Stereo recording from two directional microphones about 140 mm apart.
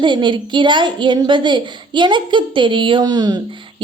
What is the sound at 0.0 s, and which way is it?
A woman's voice, 35° right (ahead or behind).